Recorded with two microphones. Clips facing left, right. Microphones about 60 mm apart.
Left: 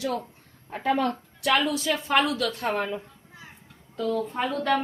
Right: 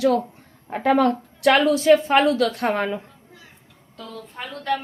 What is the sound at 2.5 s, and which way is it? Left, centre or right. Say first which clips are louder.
Speech: right 5 dB; right.